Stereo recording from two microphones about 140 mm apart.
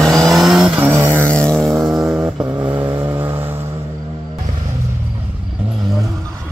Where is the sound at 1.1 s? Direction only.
10° left (ahead or behind); by 3.4 s 15° right (ahead or behind).